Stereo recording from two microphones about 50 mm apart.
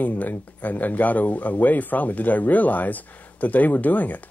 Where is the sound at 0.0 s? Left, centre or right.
Left.